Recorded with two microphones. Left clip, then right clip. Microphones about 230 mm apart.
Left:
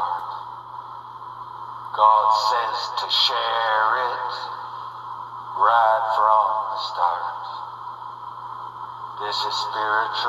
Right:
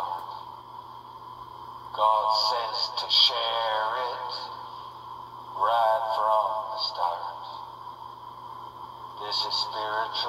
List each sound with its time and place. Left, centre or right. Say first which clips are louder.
2.0 s speech: left 7 dB; left
5.6 s speech: left 6 dB; left
9.2 s speech: left 4 dB; left